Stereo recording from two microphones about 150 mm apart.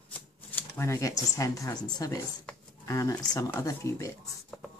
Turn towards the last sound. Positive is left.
turn(degrees=20)  # may be behind; listen again after turning